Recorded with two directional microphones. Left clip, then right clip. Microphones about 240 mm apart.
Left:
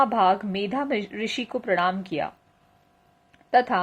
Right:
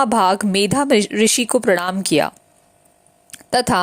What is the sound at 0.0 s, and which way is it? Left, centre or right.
A woman's voice, right.